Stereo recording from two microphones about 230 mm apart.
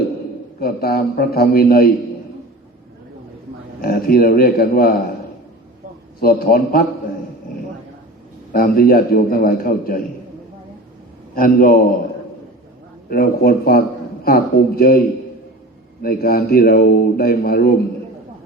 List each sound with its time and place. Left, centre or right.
0.6 s a man's voice: left
3.8 s a man's voice: left
6.1 s a man's voice: left
8.5 s a man's voice: left
11.3 s a man's voice: left
13.1 s a man's voice: left
16.0 s a man's voice: left